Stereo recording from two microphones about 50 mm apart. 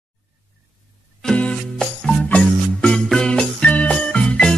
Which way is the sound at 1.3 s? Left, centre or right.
Left.